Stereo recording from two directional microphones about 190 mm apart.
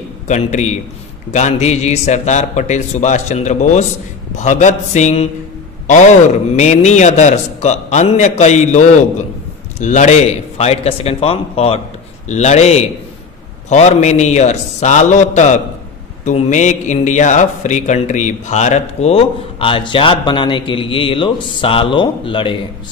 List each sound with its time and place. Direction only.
0.3 s a man's voice: 35° left (ahead or behind)
6.5 s a man's voice: 35° left (ahead or behind)